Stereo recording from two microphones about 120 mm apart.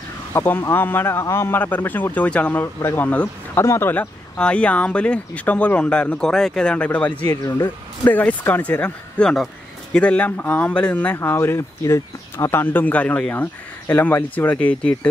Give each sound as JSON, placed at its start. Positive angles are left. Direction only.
{"t": 0.3, "sound": "speech", "side_deg": 20}
{"t": 7.2, "sound": "speech", "side_deg": 25}